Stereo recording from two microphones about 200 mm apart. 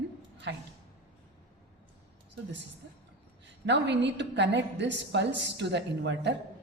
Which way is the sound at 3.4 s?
60° right (ahead or behind).